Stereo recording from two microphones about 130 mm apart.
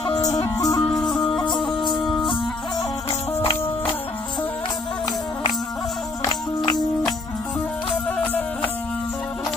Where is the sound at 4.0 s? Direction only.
45° left (ahead or behind).